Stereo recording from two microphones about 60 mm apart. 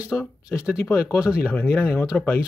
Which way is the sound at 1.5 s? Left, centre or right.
Left.